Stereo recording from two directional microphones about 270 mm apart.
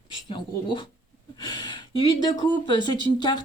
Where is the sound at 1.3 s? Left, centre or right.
Centre.